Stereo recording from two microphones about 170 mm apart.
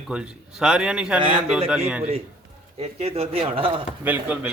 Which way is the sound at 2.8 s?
40° right (ahead or behind).